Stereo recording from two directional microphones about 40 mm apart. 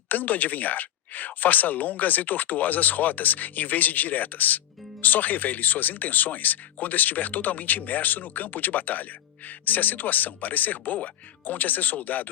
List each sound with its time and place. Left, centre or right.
0.1 s speech: left